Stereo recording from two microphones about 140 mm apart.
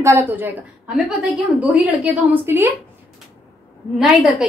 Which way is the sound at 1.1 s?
Centre (ahead or behind).